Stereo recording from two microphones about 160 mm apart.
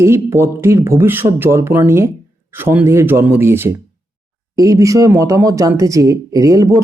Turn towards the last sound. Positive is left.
turn(degrees=-20)  # may be behind; listen again after turning